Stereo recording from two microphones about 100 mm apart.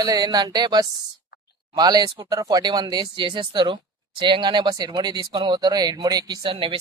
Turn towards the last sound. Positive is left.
turn(degrees=-60)  # may be behind; listen again after turning